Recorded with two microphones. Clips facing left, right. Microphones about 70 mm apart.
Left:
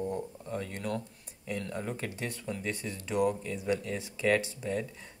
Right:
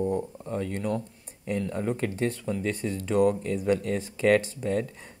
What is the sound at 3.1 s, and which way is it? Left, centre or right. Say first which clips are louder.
Speech: right 6 dB; right.